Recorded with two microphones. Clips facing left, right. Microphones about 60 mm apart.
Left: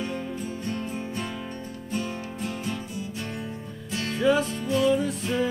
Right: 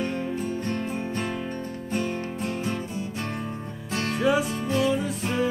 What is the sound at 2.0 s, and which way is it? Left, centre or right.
Music, right.